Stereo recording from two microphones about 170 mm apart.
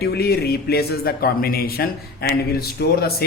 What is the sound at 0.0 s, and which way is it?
A man's voice, 70° left (ahead or behind).